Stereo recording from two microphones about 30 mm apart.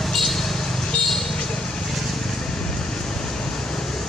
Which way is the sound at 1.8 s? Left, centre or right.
Centre.